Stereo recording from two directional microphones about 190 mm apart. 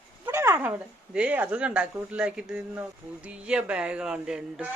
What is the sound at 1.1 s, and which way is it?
Speech, 5° right (ahead or behind).